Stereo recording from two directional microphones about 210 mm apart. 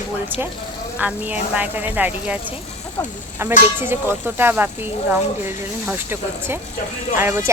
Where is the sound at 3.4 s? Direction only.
10° right (ahead or behind).